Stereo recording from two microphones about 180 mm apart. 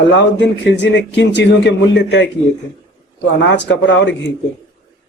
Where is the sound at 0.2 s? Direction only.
80° left.